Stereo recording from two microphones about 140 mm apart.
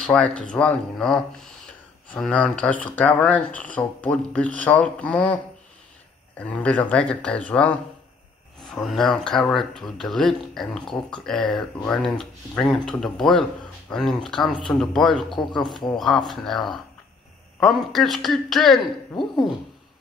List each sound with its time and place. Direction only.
0.0 s speech: 5° left (ahead or behind)